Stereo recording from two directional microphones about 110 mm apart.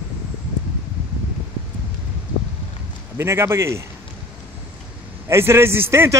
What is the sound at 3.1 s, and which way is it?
Speech, 25° right (ahead or behind).